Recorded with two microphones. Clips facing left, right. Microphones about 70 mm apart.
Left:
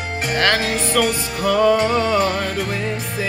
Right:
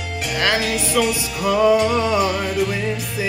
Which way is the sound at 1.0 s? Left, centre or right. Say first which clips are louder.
Even; centre.